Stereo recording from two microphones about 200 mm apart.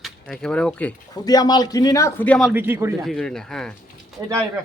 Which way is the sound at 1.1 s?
20° left (ahead or behind).